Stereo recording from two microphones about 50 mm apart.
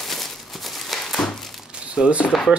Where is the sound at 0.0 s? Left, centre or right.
Centre.